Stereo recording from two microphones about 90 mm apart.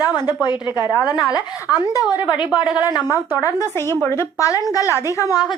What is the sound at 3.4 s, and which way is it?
A woman's voice, 40° left (ahead or behind).